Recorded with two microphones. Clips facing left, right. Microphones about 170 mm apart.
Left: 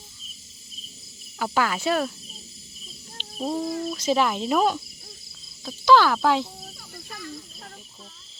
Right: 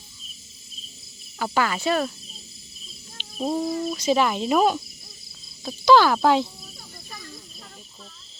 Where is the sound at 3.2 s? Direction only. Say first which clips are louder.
Right 2 dB; centre (ahead or behind).